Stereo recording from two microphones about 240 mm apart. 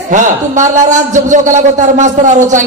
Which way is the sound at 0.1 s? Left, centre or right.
Right.